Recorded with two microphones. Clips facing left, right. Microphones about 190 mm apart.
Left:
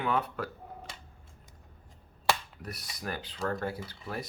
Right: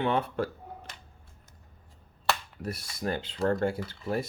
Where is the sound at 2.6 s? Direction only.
25° right (ahead or behind).